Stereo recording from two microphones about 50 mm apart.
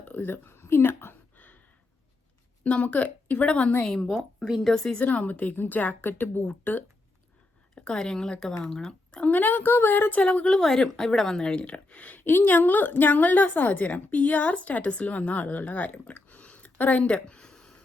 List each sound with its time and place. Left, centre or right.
0.0 s a woman's voice: left
2.6 s a woman's voice: left
3.8 s speech: centre
4.4 s speech: centre
4.7 s speech: centre
4.9 s a woman's voice: left
7.8 s speech: centre
9.3 s a woman's voice: left
10.2 s a woman's voice: left
10.5 s speech: centre
11.6 s a woman's voice: left
17.0 s a sound: left